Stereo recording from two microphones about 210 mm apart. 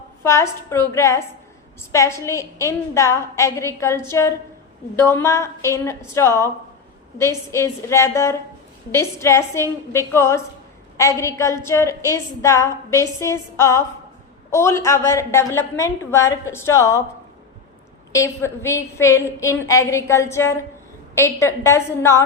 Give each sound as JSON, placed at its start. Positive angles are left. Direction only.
{"t": 0.2, "sound": "a woman's voice", "side_deg": 15}
{"t": 18.1, "sound": "a woman's voice", "side_deg": 15}